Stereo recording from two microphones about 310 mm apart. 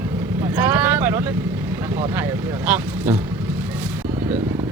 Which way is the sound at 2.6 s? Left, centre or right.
Centre.